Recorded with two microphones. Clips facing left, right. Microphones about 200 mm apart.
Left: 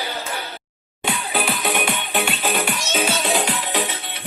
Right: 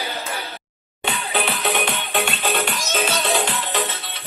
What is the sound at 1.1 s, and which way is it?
Music, centre (ahead or behind).